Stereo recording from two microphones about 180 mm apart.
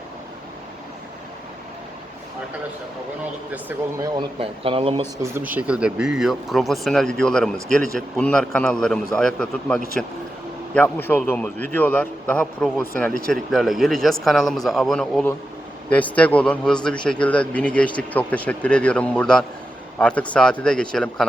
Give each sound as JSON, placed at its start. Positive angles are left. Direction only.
{"t": 3.5, "sound": "speech", "side_deg": -15}
{"t": 4.4, "sound": "speech", "side_deg": -30}
{"t": 5.2, "sound": "speech", "side_deg": -10}